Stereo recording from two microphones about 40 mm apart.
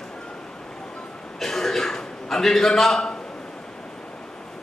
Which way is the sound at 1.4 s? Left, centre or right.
Centre.